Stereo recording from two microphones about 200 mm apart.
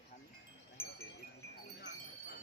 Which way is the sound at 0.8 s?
10° left (ahead or behind).